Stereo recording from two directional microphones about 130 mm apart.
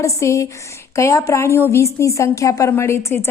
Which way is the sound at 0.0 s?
20° left (ahead or behind).